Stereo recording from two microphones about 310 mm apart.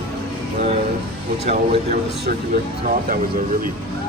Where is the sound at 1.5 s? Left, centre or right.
Centre.